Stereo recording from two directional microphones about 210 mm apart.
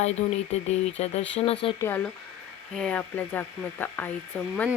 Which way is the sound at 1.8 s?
10° left (ahead or behind).